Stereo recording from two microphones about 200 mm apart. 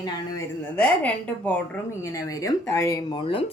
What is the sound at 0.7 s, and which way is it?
Speech, 5° left (ahead or behind).